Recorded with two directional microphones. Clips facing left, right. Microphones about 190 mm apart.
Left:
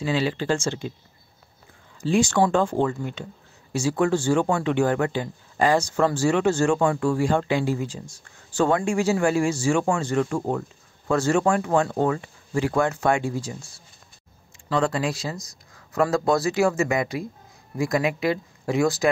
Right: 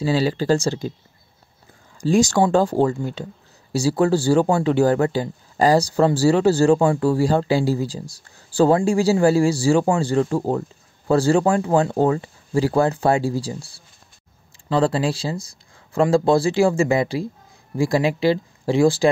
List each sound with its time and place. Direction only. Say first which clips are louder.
0.0 s speech: right 4 dB; 35° right (ahead or behind)
2.0 s speech: right 3 dB; 40° right (ahead or behind)